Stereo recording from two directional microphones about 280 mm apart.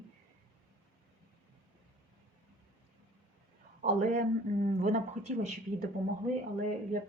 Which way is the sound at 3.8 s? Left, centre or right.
Right.